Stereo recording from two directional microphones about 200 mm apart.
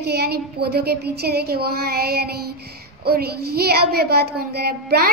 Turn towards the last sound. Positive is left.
turn(degrees=-50)  # may be behind; listen again after turning